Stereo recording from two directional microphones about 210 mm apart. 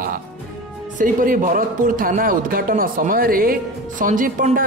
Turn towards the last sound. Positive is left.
turn(degrees=-40)  # may be behind; listen again after turning